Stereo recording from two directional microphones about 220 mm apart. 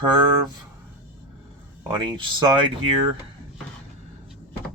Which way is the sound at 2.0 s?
20° right (ahead or behind).